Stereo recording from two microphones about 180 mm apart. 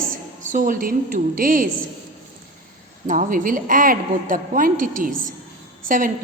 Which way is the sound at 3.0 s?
45° right (ahead or behind).